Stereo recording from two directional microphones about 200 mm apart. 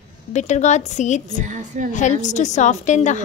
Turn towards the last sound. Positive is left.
turn(degrees=35)  # may be behind; listen again after turning